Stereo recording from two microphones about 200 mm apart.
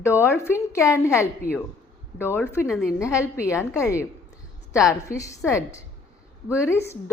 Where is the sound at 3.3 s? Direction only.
15° left (ahead or behind).